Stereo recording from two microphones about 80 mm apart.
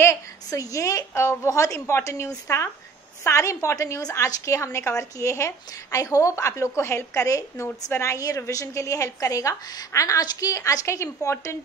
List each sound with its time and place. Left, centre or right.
0.5 s a woman's voice: left